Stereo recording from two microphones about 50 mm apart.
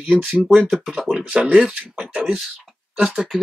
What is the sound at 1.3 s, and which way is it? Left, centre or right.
Speech, right.